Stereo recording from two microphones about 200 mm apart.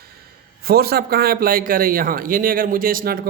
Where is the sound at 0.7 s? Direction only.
50° right (ahead or behind).